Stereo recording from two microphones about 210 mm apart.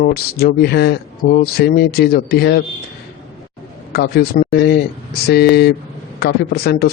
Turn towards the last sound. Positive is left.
turn(degrees=50)  # may be behind; listen again after turning